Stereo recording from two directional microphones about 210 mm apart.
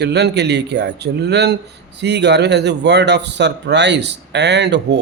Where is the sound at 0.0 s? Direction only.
55° right (ahead or behind).